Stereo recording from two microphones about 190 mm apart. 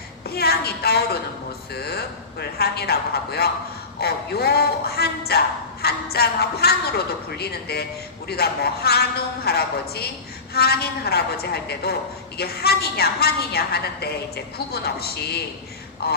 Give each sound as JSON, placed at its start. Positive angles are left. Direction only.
{"t": 0.3, "sound": "a woman's voice", "side_deg": 55}